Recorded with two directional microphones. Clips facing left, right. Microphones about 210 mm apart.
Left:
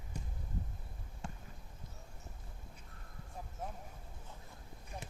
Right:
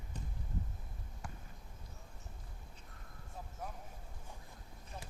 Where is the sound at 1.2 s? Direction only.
25° left (ahead or behind).